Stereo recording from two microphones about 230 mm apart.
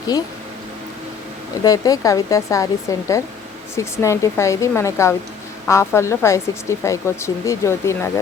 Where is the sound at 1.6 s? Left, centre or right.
Centre.